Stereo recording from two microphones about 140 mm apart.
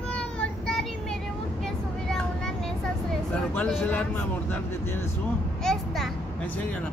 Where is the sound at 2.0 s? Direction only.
5° left (ahead or behind).